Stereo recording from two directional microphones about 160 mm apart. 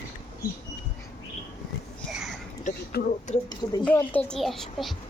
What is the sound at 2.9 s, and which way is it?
Speech, 80° left.